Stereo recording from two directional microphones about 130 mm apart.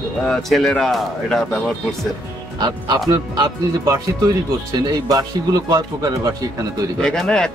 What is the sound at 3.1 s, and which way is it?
Speech, 30° right (ahead or behind).